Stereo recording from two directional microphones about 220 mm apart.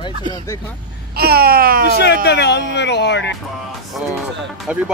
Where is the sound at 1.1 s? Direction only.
45° right (ahead or behind).